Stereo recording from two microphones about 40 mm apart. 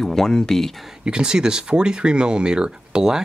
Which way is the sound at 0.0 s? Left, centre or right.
Centre.